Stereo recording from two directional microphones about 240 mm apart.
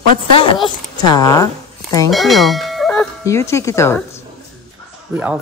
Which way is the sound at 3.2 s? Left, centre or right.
Centre.